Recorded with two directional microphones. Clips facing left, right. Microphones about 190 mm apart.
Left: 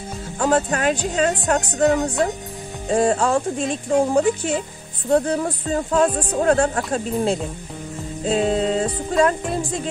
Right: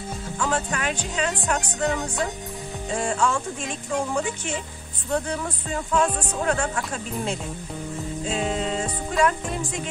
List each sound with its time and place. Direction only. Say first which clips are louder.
0.4 s speech: left 8 dB; 40° left (ahead or behind)